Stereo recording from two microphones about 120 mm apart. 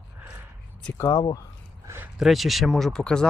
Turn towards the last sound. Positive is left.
turn(degrees=5)  # may be behind; listen again after turning